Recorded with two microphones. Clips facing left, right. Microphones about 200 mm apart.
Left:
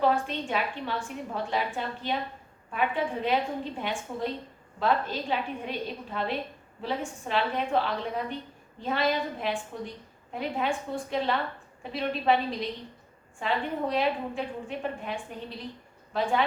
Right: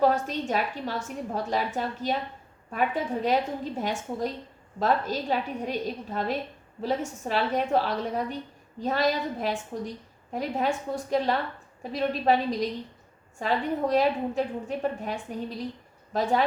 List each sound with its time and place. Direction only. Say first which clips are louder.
0.0 s a woman's voice: right 2 dB; 40° right (ahead or behind)